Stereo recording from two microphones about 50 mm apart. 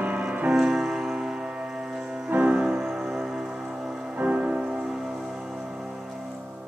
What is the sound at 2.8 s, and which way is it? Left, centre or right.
Music, centre.